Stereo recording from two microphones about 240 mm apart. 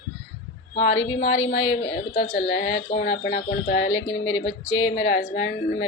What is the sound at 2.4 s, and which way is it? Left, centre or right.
Speech, left.